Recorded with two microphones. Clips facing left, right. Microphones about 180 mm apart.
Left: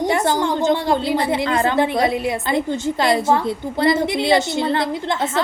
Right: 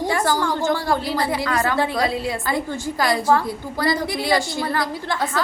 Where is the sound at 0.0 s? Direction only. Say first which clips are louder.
Left 3 dB; 20° left (ahead or behind).